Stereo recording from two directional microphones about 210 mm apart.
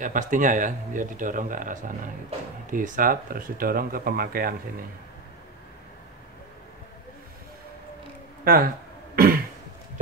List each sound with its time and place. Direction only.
0.0 s speech: 40° right (ahead or behind)
9.1 s throat clearing: 45° right (ahead or behind)